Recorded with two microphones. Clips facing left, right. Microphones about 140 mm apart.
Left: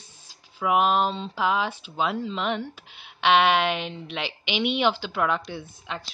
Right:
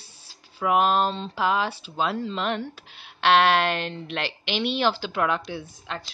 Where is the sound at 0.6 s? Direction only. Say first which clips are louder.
Even; 5° left (ahead or behind).